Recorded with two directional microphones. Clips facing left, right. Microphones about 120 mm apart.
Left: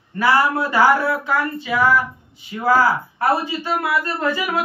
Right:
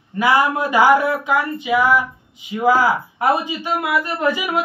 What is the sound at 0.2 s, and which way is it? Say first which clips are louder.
Speech: right 1 dB; 15° right (ahead or behind).